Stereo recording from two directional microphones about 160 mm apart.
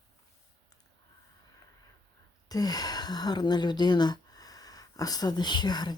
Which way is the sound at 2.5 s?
25° left (ahead or behind).